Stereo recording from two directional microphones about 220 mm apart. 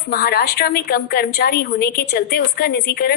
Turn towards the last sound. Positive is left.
turn(degrees=45)  # may be behind; listen again after turning